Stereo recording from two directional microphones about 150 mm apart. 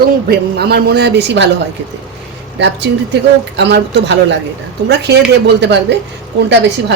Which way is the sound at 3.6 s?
90° right.